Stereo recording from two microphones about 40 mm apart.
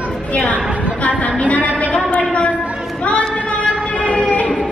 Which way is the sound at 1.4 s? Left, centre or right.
Left.